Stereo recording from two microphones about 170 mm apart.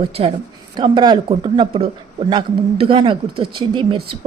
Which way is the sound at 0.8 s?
25° right (ahead or behind).